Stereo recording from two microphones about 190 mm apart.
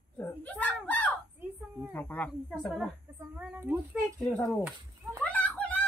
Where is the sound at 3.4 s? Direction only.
10° right (ahead or behind).